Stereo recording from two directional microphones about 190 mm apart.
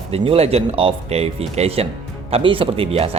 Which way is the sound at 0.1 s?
30° right (ahead or behind).